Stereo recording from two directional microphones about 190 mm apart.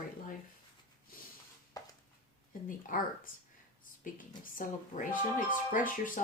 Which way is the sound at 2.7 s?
45° left (ahead or behind).